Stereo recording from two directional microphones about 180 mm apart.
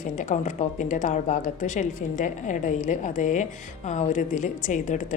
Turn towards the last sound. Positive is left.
turn(degrees=45)  # may be behind; listen again after turning